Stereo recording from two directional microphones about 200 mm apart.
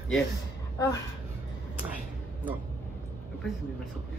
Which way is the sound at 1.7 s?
5° right (ahead or behind).